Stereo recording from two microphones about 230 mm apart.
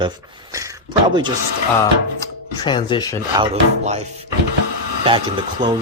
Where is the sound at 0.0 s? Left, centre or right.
Centre.